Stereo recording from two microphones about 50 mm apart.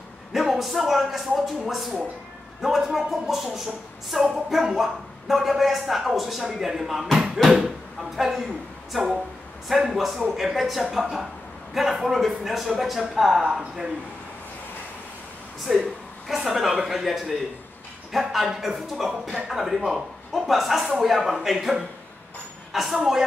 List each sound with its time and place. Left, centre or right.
0.3 s a man's voice: centre
9.7 s speech: centre
15.7 s speech: centre